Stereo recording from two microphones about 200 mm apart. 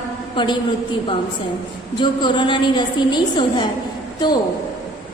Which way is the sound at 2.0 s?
25° left (ahead or behind).